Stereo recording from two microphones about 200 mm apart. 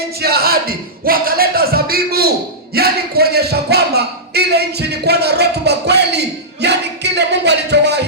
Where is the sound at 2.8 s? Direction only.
50° right (ahead or behind).